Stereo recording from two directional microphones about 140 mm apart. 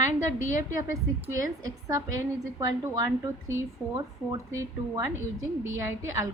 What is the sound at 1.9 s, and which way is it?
A woman's voice, 25° right (ahead or behind).